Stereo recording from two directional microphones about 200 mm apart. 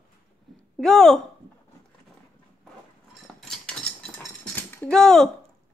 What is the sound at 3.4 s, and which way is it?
Cutlery, 5° left (ahead or behind).